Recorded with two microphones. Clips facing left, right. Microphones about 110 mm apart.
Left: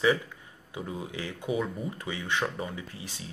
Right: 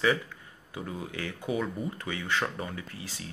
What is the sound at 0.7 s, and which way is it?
Speech, 20° left (ahead or behind).